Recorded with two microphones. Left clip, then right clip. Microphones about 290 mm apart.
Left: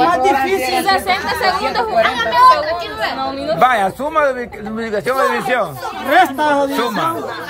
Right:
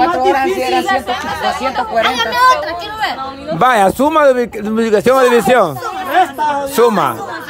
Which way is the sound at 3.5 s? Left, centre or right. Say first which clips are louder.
Right 4 dB; right.